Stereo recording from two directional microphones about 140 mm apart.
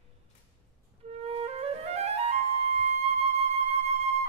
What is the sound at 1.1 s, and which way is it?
Flute, 45° right (ahead or behind).